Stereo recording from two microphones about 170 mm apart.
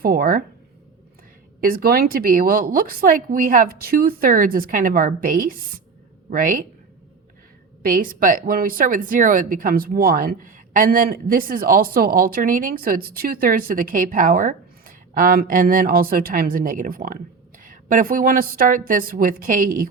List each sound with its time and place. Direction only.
0.0 s speech: 55° right (ahead or behind)
1.6 s speech: 60° right (ahead or behind)
7.8 s speech: 55° right (ahead or behind)